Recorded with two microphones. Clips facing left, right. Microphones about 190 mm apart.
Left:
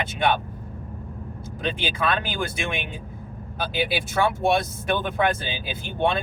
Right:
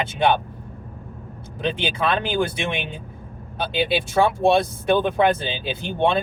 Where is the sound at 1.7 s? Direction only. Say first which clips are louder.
Right 3 dB; 25° right (ahead or behind).